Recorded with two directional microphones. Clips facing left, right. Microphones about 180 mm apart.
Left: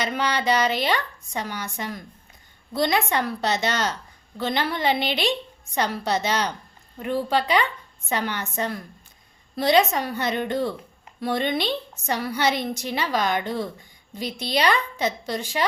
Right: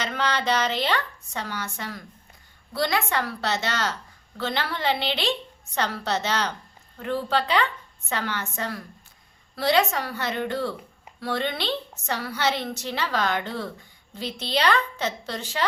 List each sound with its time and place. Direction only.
0.0 s a woman's voice: 10° left (ahead or behind)